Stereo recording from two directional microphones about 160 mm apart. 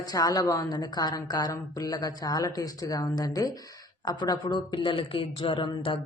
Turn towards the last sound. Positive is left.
turn(degrees=35)  # may be behind; listen again after turning